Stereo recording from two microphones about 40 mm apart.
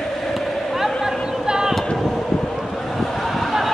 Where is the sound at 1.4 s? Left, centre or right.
Centre.